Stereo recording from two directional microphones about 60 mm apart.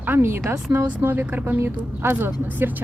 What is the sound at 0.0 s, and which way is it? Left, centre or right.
Speech, right.